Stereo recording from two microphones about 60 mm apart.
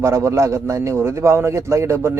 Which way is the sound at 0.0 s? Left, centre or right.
Right.